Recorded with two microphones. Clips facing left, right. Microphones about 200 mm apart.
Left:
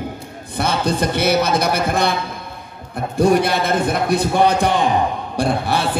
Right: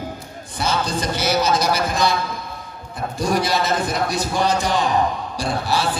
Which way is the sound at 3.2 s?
60° left (ahead or behind).